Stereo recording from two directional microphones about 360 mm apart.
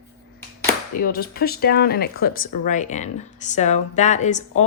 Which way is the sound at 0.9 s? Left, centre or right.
Left.